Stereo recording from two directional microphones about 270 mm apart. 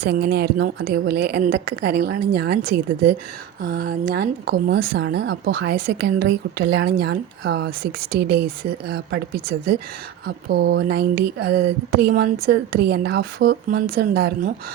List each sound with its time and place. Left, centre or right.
0.0 s speech: right